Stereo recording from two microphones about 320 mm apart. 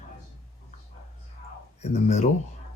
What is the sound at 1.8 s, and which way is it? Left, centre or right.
Speech, left.